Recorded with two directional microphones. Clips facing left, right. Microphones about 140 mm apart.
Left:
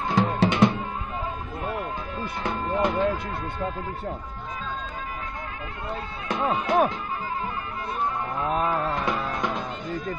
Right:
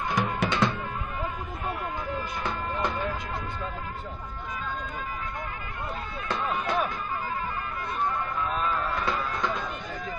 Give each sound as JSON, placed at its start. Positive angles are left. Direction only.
{"t": 0.1, "sound": "music", "side_deg": 25}
{"t": 2.4, "sound": "music", "side_deg": 25}
{"t": 6.2, "sound": "speech", "side_deg": 20}
{"t": 8.9, "sound": "music", "side_deg": 20}